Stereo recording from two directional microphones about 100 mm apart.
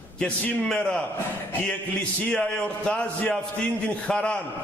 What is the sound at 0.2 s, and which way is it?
Speech, 10° left (ahead or behind).